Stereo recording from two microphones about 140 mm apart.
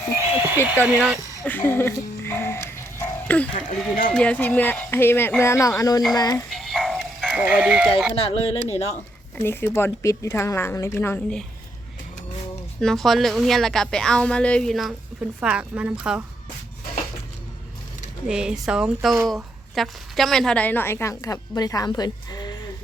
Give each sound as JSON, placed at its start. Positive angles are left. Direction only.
{"t": 0.2, "sound": "a sound", "side_deg": -15}
{"t": 1.5, "sound": "speech", "side_deg": 15}
{"t": 3.7, "sound": "speech", "side_deg": 75}
{"t": 4.1, "sound": "a woman's voice", "side_deg": 10}
{"t": 6.5, "sound": "music", "side_deg": 0}
{"t": 8.2, "sound": "speech", "side_deg": 45}
{"t": 9.4, "sound": "speech", "side_deg": 15}
{"t": 12.8, "sound": "a woman's voice", "side_deg": 0}
{"t": 18.3, "sound": "a woman's voice", "side_deg": -5}